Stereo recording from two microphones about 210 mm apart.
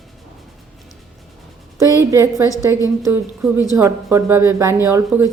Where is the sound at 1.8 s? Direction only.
15° right (ahead or behind).